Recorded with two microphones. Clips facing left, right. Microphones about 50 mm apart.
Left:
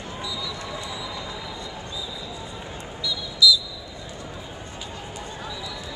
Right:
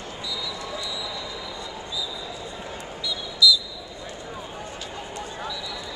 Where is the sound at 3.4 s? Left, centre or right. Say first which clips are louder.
Left 1 dB; centre.